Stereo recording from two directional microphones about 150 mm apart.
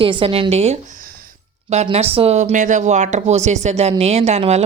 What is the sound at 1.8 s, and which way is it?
A woman's voice, 40° right (ahead or behind).